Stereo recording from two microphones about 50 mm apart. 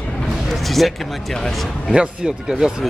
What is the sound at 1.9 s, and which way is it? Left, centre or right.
Speech, centre.